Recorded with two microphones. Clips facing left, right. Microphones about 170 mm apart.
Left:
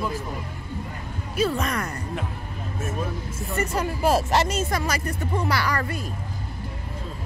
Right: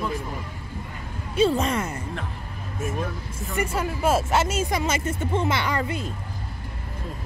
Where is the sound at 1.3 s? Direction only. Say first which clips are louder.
Right 3 dB; 30° right (ahead or behind).